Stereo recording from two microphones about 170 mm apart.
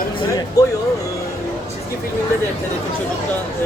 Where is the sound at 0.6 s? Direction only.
20° left (ahead or behind).